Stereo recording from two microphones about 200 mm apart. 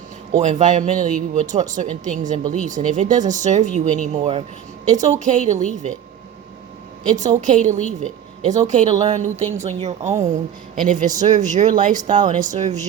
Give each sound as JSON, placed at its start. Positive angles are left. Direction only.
{"t": 0.3, "sound": "speech", "side_deg": -35}
{"t": 7.2, "sound": "speech", "side_deg": -40}